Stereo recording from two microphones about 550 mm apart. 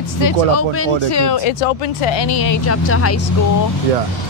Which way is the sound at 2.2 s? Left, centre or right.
Left.